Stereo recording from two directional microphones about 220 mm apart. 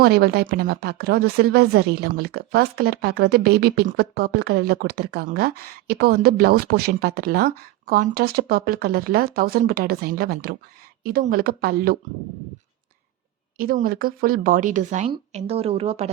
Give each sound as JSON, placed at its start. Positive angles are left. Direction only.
{"t": 0.0, "sound": "a woman's voice", "side_deg": -45}
{"t": 13.6, "sound": "a woman's voice", "side_deg": -40}